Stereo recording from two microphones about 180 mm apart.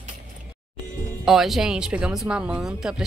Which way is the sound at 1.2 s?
Centre (ahead or behind).